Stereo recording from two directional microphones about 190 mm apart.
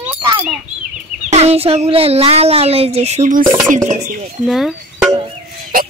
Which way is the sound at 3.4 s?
15° right (ahead or behind).